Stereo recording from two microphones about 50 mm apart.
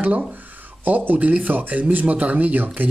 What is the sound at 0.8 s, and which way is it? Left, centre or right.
Speech, right.